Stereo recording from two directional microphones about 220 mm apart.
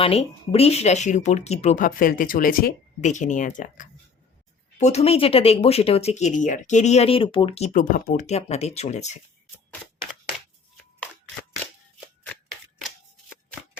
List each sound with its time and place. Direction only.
0.0 s speech: 25° left (ahead or behind)